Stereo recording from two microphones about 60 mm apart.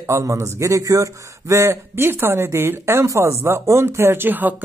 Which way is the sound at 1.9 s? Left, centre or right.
Right.